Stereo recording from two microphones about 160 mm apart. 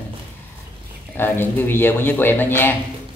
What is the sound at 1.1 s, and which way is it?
Speech, 15° left (ahead or behind).